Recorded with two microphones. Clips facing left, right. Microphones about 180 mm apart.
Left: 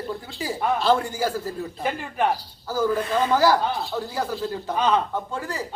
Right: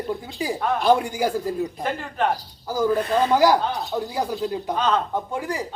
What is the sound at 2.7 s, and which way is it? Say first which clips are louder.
A man's voice: right 2 dB; 15° right (ahead or behind).